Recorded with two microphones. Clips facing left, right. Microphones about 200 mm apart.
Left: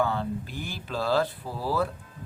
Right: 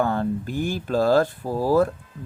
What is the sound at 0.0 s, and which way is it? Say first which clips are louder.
Speech: right 5 dB; 50° right (ahead or behind).